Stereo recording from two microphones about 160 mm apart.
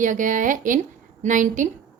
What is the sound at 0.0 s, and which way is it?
A woman's voice, 55° right (ahead or behind).